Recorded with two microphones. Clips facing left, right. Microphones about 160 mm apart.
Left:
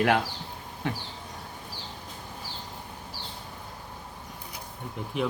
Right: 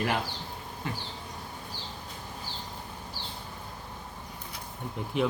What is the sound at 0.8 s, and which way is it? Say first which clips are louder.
Bee: left 5 dB; 65° left (ahead or behind).